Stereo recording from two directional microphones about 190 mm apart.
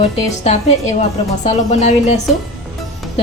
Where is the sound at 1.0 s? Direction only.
35° left (ahead or behind).